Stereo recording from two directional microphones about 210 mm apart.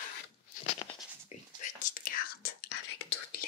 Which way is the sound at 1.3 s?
40° left (ahead or behind).